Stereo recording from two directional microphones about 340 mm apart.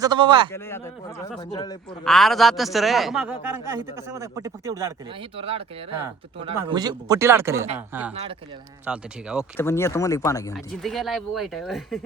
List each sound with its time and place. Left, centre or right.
0.0 s speech: centre
1.5 s speech: centre
2.0 s a man's voice: centre
8.9 s a man's voice: centre
9.4 s speech: centre